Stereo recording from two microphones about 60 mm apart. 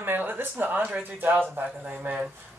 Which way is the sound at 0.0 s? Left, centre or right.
Right.